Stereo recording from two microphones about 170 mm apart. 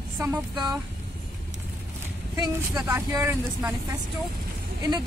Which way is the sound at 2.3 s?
25° right (ahead or behind).